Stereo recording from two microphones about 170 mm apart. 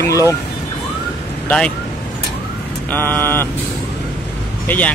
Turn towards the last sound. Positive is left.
turn(degrees=10)  # may be behind; listen again after turning